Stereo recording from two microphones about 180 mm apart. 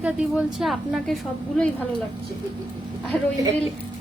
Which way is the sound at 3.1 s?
20° right (ahead or behind).